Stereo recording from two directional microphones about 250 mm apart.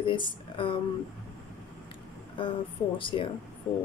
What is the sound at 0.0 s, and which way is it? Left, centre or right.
Speech, centre.